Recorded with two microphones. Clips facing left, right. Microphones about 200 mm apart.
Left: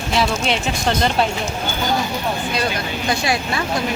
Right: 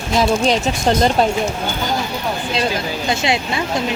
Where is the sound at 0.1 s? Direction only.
40° right (ahead or behind).